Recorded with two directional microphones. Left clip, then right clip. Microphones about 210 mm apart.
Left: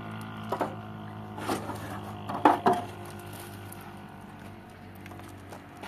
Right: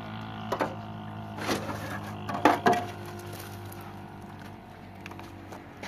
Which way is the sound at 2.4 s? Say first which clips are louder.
Even; 25° right (ahead or behind).